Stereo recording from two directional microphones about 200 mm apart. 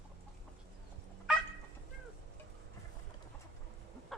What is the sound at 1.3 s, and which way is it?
Fowl, 5° right (ahead or behind).